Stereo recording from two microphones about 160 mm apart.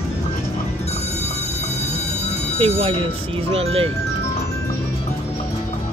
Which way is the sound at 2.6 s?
40° right (ahead or behind).